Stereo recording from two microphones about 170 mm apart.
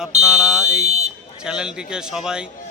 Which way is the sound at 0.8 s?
40° right (ahead or behind).